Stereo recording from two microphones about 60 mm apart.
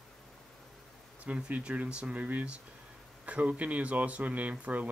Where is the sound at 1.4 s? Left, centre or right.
Centre.